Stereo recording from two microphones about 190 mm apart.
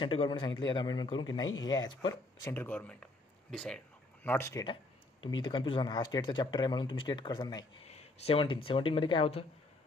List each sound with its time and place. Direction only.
0.0 s speech: 30° left (ahead or behind)
1.4 s speech: 90° left
2.0 s speech: 20° left (ahead or behind)
2.6 s speech: 10° left (ahead or behind)
7.9 s a sound: 30° left (ahead or behind)
8.6 s speech: 30° left (ahead or behind)